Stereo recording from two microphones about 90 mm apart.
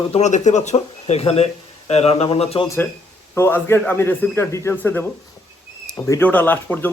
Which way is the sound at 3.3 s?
25° left (ahead or behind).